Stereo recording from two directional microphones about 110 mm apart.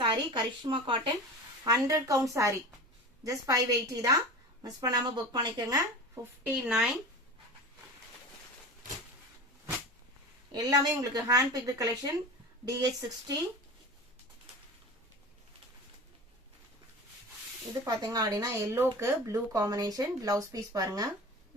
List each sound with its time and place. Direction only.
0.0 s speech: 45° right (ahead or behind)
1.6 s a woman's voice: 35° right (ahead or behind)
6.4 s speech: 10° right (ahead or behind)
10.5 s speech: 40° right (ahead or behind)
17.8 s speech: 35° right (ahead or behind)